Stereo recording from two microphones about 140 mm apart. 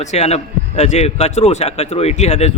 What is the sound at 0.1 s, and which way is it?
A man's voice, 50° left (ahead or behind).